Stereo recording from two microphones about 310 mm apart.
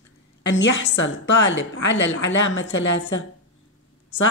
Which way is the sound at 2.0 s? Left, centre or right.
Left.